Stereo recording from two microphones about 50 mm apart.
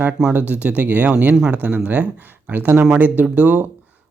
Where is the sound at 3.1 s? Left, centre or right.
Right.